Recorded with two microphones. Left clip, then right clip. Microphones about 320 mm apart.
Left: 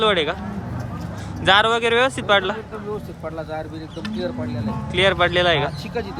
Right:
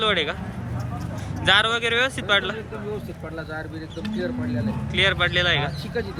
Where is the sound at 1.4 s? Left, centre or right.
Centre.